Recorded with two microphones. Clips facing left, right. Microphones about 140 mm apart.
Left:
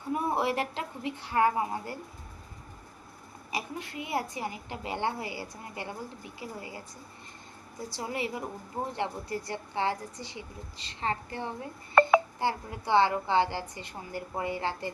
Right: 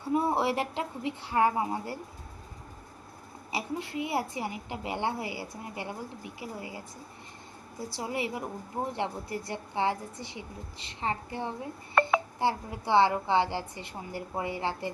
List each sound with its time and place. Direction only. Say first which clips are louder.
0.1 s a woman's voice: right 2 dB; 20° right (ahead or behind)
3.5 s a woman's voice: right 3 dB; 20° right (ahead or behind)
7.9 s a woman's voice: right 1 dB; 20° right (ahead or behind)